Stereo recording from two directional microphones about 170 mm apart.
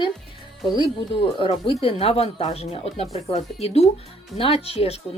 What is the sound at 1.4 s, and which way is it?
Speech, 30° left (ahead or behind).